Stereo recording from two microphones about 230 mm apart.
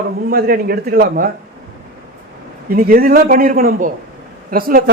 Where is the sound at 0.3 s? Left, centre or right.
Right.